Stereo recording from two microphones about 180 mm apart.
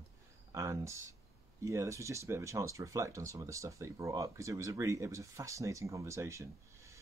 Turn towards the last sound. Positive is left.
turn(degrees=-15)  # may be behind; listen again after turning